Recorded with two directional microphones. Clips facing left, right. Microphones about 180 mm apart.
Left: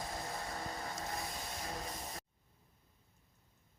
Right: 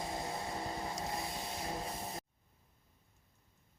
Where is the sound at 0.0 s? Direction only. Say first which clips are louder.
Right 3 dB; 25° right (ahead or behind).